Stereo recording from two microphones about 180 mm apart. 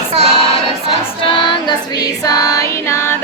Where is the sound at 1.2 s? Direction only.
30° left (ahead or behind).